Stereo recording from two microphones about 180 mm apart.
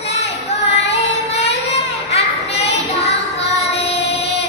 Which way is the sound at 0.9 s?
35° left (ahead or behind).